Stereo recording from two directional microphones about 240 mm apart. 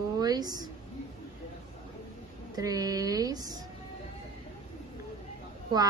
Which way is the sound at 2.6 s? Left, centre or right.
Centre.